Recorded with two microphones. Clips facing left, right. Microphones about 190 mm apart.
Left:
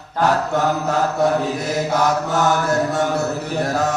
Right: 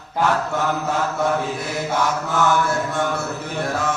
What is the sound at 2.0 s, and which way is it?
Mantra, 40° left (ahead or behind).